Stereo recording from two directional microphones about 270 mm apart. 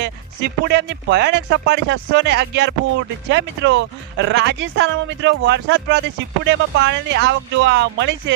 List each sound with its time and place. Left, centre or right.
0.6 s speech: right